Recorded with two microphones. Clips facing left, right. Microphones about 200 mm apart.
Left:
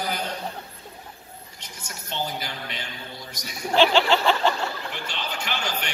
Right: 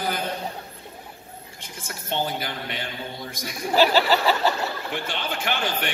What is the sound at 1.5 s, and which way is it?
A woman's voice, 50° right (ahead or behind).